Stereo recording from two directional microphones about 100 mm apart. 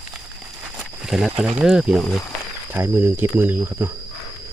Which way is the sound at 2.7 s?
25° right (ahead or behind).